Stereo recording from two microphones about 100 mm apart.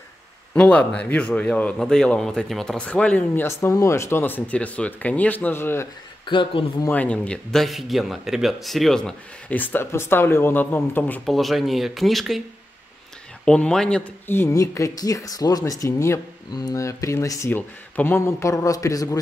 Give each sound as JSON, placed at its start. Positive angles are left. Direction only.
{"t": 0.6, "sound": "speech", "side_deg": 10}
{"t": 2.8, "sound": "speech", "side_deg": 15}
{"t": 6.2, "sound": "speech", "side_deg": 55}
{"t": 6.9, "sound": "speech", "side_deg": 15}
{"t": 7.6, "sound": "speech", "side_deg": 0}
{"t": 11.2, "sound": "speech", "side_deg": 0}
{"t": 13.5, "sound": "speech", "side_deg": 10}
{"t": 14.2, "sound": "speech", "side_deg": 25}
{"t": 14.6, "sound": "speech", "side_deg": 35}
{"t": 17.5, "sound": "speech", "side_deg": 20}